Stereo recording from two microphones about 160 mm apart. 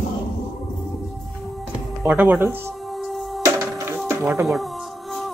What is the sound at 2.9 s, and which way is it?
Music, centre (ahead or behind).